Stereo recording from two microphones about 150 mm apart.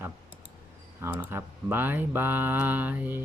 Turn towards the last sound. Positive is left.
turn(degrees=-10)  # may be behind; listen again after turning